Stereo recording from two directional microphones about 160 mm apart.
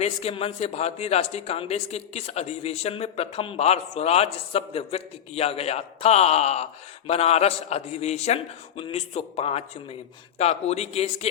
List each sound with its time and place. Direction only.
0.0 s a man's voice: 40° left (ahead or behind)